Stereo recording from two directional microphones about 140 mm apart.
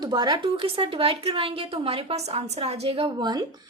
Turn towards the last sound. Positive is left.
turn(degrees=-30)  # may be behind; listen again after turning